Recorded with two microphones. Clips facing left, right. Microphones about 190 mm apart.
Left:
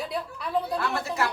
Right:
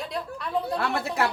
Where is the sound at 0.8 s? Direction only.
60° right (ahead or behind).